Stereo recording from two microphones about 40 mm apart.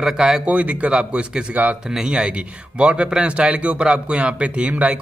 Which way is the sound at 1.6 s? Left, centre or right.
Right.